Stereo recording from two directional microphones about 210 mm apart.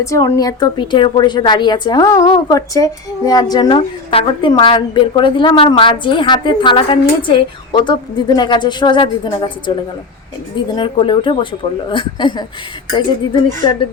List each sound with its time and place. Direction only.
0.0 s a woman's voice: 15° left (ahead or behind)
10.8 s a woman's voice: 25° left (ahead or behind)
13.6 s a woman's voice: 25° left (ahead or behind)